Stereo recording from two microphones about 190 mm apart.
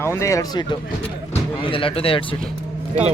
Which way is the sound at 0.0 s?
15° left (ahead or behind).